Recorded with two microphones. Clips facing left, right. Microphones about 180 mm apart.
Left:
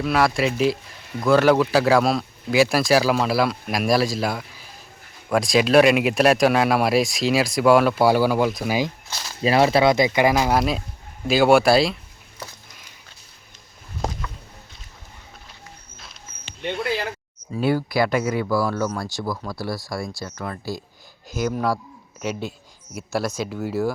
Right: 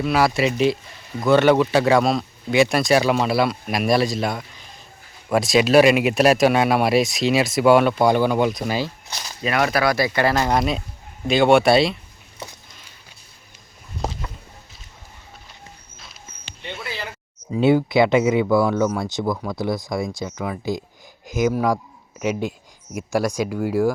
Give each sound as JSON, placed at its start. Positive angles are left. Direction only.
{"t": 0.0, "sound": "speech", "side_deg": 0}
{"t": 9.4, "sound": "speech", "side_deg": 30}
{"t": 10.3, "sound": "speech", "side_deg": 0}
{"t": 17.5, "sound": "speech", "side_deg": -20}
{"t": 18.7, "sound": "speech", "side_deg": -10}
{"t": 19.0, "sound": "speech", "side_deg": -20}
{"t": 20.2, "sound": "speech", "side_deg": -10}